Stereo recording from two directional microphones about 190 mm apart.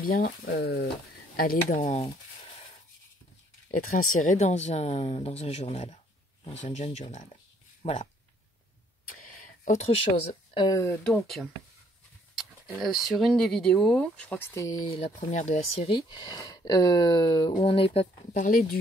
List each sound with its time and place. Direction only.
0.0 s speech: 50° left (ahead or behind)
1.8 s a sound: 30° left (ahead or behind)
4.1 s speech: 45° left (ahead or behind)
9.1 s a sound: 45° left (ahead or behind)
10.5 s speech: 20° left (ahead or behind)
11.1 s speech: centre (ahead or behind); by 18.0 s 30° left (ahead or behind)
18.3 s speech: 45° left (ahead or behind)